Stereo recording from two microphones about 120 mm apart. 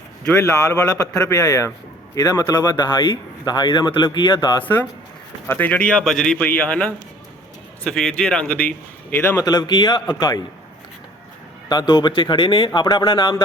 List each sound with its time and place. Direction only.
0.5 s a man's voice: 25° left (ahead or behind)
4.6 s speech: 15° left (ahead or behind)
9.4 s speech: 35° left (ahead or behind)
11.7 s speech: 35° left (ahead or behind)